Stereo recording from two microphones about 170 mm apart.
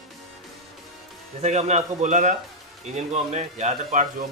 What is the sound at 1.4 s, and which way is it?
A man's voice, 40° right (ahead or behind).